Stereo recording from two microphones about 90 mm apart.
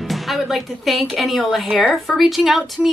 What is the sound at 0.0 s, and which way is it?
A woman's voice, centre (ahead or behind).